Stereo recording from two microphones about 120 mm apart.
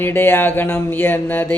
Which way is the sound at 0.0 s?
20° left (ahead or behind).